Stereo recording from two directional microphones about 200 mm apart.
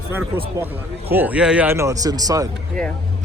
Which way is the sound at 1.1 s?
10° right (ahead or behind).